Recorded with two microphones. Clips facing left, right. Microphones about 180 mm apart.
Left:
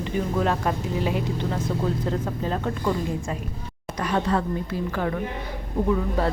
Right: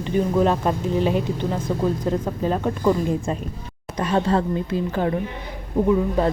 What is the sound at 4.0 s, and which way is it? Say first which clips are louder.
Speech: right 4 dB; 30° right (ahead or behind).